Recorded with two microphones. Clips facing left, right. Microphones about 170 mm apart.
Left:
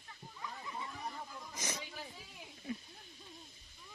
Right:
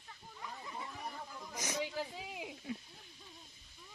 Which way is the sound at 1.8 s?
90° right.